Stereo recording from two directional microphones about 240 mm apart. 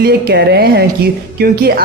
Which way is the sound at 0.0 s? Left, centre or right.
Right.